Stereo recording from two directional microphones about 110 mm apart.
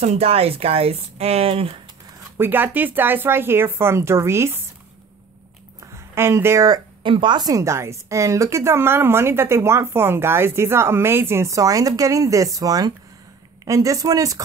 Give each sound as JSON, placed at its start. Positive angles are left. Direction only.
{"t": 0.0, "sound": "speech", "side_deg": -75}
{"t": 2.3, "sound": "speech", "side_deg": -20}
{"t": 5.8, "sound": "a sound", "side_deg": -25}
{"t": 6.7, "sound": "speech", "side_deg": -50}